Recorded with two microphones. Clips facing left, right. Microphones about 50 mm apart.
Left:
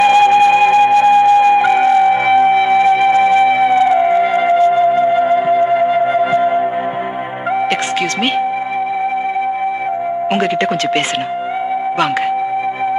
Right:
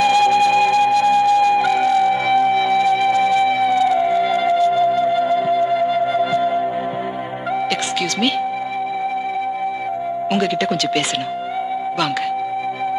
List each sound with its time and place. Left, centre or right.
0.0 s music: left